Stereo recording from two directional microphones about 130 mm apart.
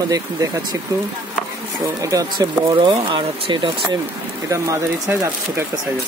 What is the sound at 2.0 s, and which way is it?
Speech, 25° right (ahead or behind).